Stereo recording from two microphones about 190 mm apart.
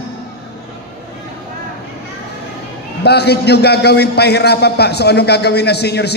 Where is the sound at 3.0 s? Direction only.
60° left (ahead or behind).